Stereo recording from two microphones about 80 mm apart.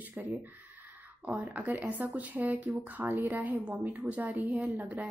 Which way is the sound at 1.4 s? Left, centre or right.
Centre.